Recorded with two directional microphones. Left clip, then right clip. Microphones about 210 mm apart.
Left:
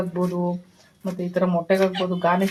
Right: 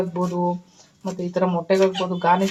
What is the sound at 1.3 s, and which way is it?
Speech, 20° right (ahead or behind).